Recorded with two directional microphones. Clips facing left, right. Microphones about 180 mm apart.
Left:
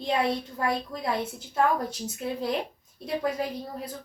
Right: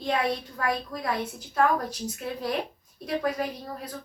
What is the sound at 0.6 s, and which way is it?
Speech, 25° left (ahead or behind).